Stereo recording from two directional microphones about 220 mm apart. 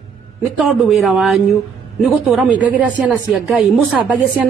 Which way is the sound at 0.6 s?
Centre (ahead or behind).